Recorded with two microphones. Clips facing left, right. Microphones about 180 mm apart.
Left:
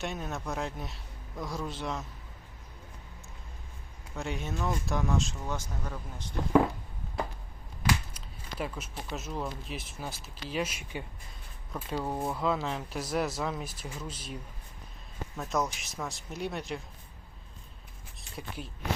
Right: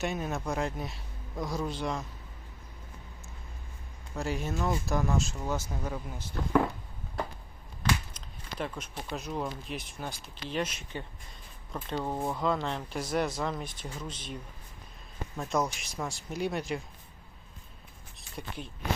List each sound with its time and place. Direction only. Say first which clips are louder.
0.0 s speech: right 3 dB; 5° right (ahead or behind)
1.4 s a man's voice: right 3 dB; 20° right (ahead or behind)
1.6 s speech: right 2 dB; centre (ahead or behind)
4.1 s speech: right 3 dB; centre (ahead or behind)
7.8 s speech: left 1 dB; 10° left (ahead or behind)
18.2 s speech: even; 5° left (ahead or behind)